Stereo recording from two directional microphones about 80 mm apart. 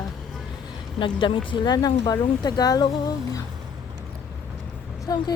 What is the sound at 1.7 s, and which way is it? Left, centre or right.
Speech, left.